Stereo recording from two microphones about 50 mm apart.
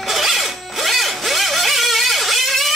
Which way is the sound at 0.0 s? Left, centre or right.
Centre.